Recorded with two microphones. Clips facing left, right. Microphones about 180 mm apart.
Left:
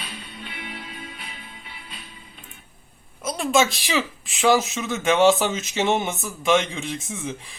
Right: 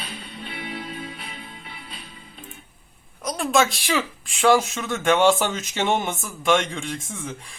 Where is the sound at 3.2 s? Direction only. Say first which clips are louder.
Even; centre (ahead or behind).